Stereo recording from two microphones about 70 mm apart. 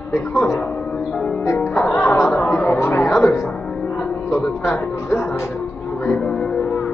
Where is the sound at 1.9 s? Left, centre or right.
Left.